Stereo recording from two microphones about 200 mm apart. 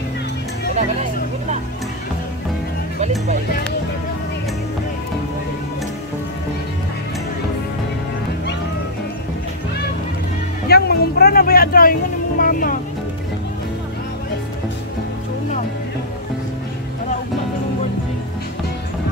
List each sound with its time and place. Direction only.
10.7 s vehicle: 50° left (ahead or behind)